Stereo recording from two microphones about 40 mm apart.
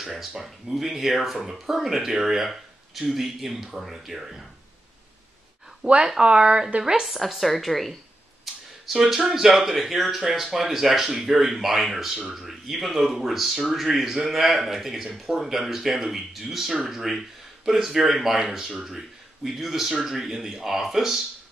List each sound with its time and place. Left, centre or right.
0.0 s speech: centre
5.8 s speech: right
7.2 s speech: centre
8.8 s speech: centre